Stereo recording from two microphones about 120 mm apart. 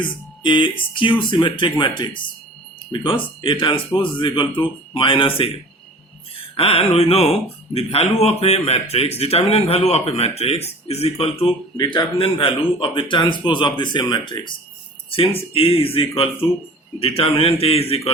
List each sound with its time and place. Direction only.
0.4 s a man's voice: 45° left (ahead or behind)
15.1 s a man's voice: 50° left (ahead or behind)